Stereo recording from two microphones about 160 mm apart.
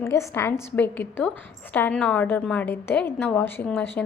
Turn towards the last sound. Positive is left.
turn(degrees=10)  # may be behind; listen again after turning